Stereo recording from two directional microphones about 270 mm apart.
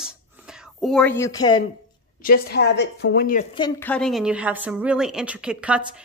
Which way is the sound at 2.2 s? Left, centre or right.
Left.